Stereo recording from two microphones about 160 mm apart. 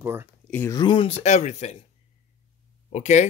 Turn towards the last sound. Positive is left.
turn(degrees=45)  # may be behind; listen again after turning